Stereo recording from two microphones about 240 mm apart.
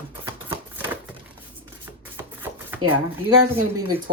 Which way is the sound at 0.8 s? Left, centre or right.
Centre.